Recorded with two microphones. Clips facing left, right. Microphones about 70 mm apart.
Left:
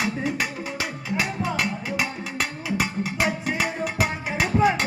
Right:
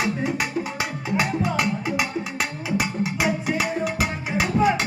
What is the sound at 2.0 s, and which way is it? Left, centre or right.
Music, centre.